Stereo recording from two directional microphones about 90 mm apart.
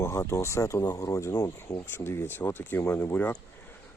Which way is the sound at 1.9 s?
25° left (ahead or behind).